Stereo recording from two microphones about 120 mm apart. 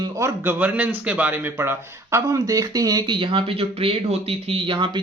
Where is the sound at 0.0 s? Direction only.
25° right (ahead or behind).